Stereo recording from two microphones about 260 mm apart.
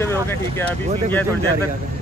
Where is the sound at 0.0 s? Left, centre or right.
Centre.